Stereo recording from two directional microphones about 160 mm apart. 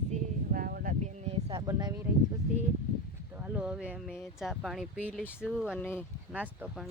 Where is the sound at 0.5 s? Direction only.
60° right (ahead or behind).